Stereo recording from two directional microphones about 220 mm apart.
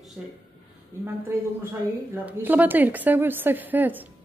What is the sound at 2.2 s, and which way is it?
A woman's voice, 10° right (ahead or behind).